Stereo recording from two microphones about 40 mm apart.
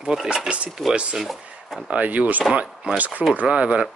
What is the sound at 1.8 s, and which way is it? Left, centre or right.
Speech, right.